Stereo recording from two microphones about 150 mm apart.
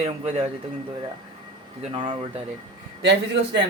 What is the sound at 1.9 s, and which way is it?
Speech, 35° right (ahead or behind).